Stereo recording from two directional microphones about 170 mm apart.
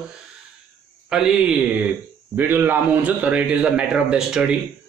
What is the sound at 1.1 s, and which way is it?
A man's voice, 5° right (ahead or behind).